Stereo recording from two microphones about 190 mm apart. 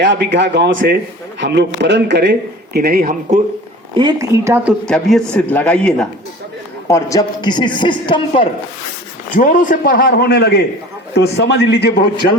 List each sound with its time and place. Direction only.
0.0 s a man's voice: 65° right (ahead or behind)
2.7 s speech: 50° right (ahead or behind)
3.9 s speech: 20° right (ahead or behind)
4.9 s a man's voice: centre (ahead or behind)
6.8 s a man's voice: 15° left (ahead or behind)
9.3 s speech: 45° left (ahead or behind)
9.9 s a man's voice: 55° left (ahead or behind)